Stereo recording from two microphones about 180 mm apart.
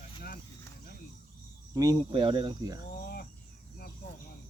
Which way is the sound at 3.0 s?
60° left (ahead or behind).